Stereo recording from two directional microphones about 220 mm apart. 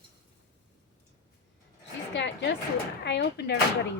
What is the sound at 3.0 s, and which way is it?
Speech, 50° left (ahead or behind).